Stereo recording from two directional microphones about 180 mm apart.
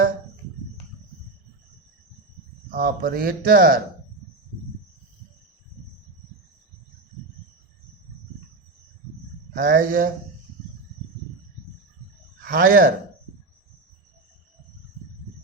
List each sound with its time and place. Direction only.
2.6 s speech: 55° right (ahead or behind)
9.5 s speech: 50° right (ahead or behind)
12.5 s speech: 55° right (ahead or behind)